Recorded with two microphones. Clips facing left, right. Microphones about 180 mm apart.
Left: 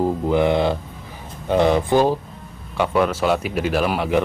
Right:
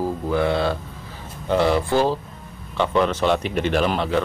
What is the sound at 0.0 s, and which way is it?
Music, 20° left (ahead or behind).